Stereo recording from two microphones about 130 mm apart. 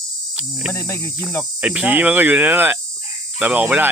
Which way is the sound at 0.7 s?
20° left (ahead or behind).